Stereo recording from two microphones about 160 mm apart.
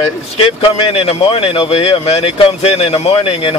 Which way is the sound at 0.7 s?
35° left (ahead or behind).